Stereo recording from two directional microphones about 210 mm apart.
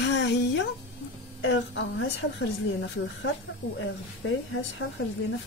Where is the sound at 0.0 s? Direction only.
55° left (ahead or behind).